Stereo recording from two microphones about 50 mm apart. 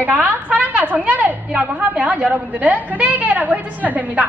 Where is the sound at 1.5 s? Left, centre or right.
Right.